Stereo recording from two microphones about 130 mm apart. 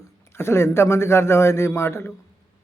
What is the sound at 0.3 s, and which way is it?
Speech, 20° left (ahead or behind).